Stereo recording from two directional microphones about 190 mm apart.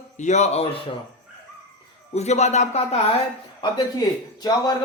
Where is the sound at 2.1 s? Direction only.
35° left (ahead or behind).